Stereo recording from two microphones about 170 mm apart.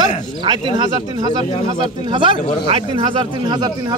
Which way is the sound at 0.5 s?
25° right (ahead or behind).